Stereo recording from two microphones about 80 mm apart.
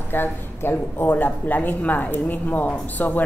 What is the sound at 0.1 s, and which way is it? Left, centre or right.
Speech, left.